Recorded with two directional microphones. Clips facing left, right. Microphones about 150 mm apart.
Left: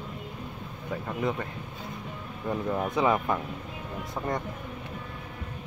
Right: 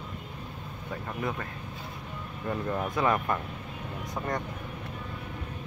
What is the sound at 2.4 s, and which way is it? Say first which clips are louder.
Speech: left 2 dB; 10° left (ahead or behind).